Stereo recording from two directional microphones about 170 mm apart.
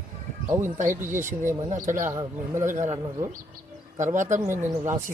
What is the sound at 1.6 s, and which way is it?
Speech, 45° right (ahead or behind).